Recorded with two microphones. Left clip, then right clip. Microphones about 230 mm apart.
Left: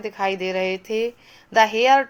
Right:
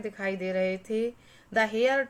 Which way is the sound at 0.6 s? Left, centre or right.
Left.